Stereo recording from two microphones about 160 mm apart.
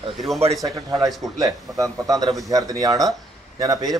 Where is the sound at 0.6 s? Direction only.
20° right (ahead or behind).